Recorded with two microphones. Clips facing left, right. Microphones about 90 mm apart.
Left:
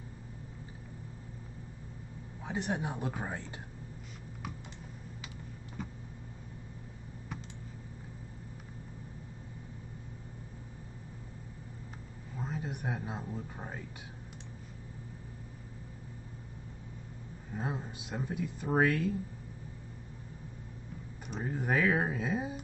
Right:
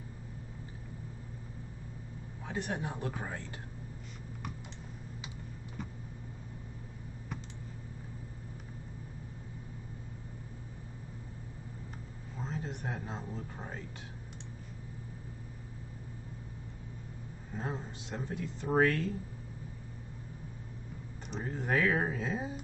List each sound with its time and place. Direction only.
2.4 s speech: 15° left (ahead or behind)
12.4 s speech: 10° left (ahead or behind)
17.6 s speech: 10° left (ahead or behind)
21.3 s speech: 5° left (ahead or behind)